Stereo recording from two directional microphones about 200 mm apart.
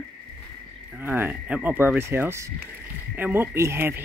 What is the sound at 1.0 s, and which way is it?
Speech, 10° right (ahead or behind).